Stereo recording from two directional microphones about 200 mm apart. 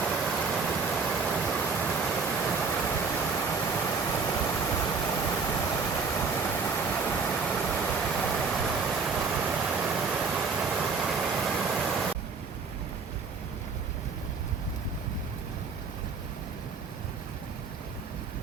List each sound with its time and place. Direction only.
0.0 s vehicle: centre (ahead or behind)
3.3 s waterfall: 10° left (ahead or behind)
4.1 s a sound: 10° left (ahead or behind)
6.1 s vehicle: 10° left (ahead or behind)